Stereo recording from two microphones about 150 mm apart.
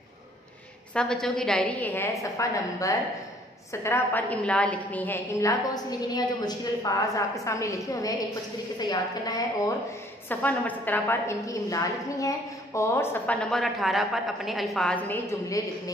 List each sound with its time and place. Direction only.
0.9 s a woman's voice: 5° left (ahead or behind); by 9.4 s 25° left (ahead or behind)
10.2 s a woman's voice: 10° left (ahead or behind)